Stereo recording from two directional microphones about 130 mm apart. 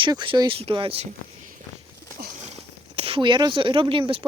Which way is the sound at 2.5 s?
50° right (ahead or behind).